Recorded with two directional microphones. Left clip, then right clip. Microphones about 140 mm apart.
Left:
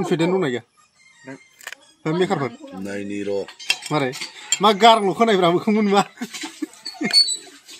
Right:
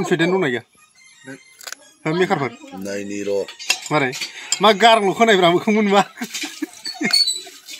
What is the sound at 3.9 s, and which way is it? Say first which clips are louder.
Cutlery: right 3 dB; 10° right (ahead or behind).